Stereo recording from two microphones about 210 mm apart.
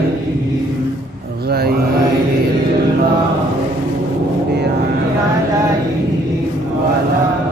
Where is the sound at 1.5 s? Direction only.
50° right (ahead or behind).